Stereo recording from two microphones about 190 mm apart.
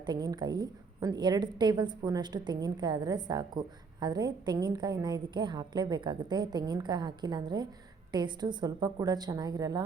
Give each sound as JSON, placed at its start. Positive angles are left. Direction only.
{"t": 0.0, "sound": "a woman's voice", "side_deg": -20}